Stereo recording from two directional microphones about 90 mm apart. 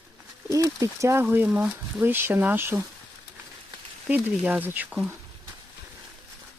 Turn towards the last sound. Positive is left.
turn(degrees=-20)  # may be behind; listen again after turning